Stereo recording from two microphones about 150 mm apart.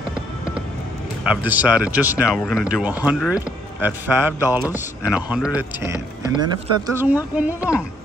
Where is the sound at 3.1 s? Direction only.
Centre (ahead or behind).